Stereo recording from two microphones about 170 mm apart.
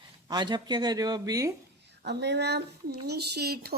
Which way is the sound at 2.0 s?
80° right.